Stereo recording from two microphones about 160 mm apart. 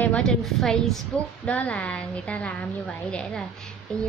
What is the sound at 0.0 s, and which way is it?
A woman's voice, 5° left (ahead or behind).